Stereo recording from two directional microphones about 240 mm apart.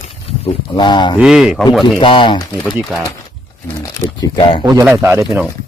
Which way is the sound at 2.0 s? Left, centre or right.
Left.